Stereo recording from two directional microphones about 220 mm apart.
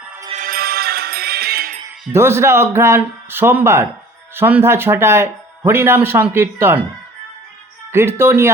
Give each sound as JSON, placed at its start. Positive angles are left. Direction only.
{"t": 0.3, "sound": "music", "side_deg": -40}
{"t": 2.1, "sound": "speech", "side_deg": -10}
{"t": 7.9, "sound": "speech", "side_deg": -10}